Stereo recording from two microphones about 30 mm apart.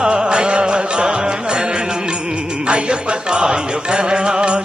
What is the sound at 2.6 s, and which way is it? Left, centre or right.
Music, right.